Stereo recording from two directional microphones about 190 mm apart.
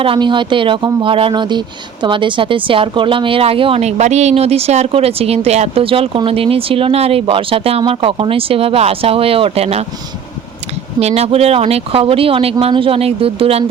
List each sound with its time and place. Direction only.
0.0 s speech: 25° right (ahead or behind)
11.0 s speech: 30° right (ahead or behind)